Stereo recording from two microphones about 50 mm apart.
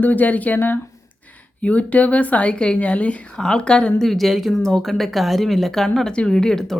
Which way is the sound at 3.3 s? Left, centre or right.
Centre.